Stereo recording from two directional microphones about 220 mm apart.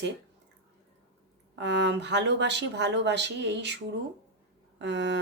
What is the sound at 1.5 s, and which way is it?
Speech, 50° right (ahead or behind).